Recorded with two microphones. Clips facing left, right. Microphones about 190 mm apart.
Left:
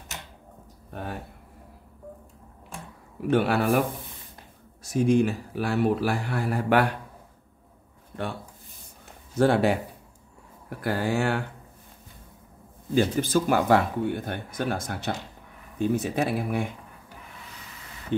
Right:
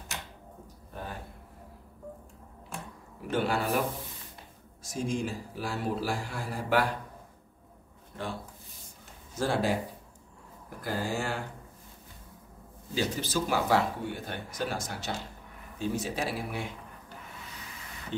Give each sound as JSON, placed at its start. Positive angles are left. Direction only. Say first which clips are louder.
{"t": 3.3, "sound": "speech", "louder": "left 7 dB", "side_deg": 65}
{"t": 4.8, "sound": "speech", "louder": "left 10 dB", "side_deg": 65}
{"t": 9.4, "sound": "speech", "louder": "left 7 dB", "side_deg": 65}
{"t": 12.9, "sound": "speech", "louder": "left 8 dB", "side_deg": 55}